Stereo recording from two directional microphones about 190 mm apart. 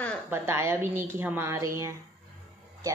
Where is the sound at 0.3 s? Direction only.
15° right (ahead or behind).